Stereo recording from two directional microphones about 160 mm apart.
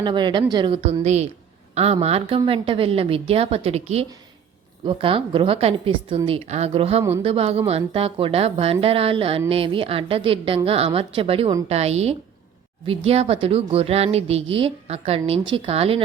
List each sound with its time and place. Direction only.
0.0 s speech: 30° right (ahead or behind)